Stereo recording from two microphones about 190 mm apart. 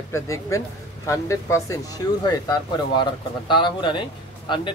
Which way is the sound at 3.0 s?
25° left (ahead or behind).